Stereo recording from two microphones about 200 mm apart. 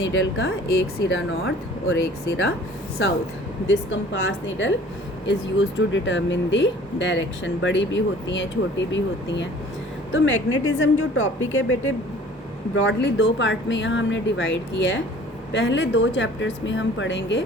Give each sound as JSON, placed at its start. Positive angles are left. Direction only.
{"t": 0.1, "sound": "speech", "side_deg": 60}
{"t": 3.7, "sound": "speech", "side_deg": 70}
{"t": 10.1, "sound": "a woman's voice", "side_deg": 75}